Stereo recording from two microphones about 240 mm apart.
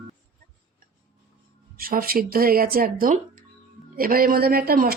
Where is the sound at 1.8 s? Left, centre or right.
Right.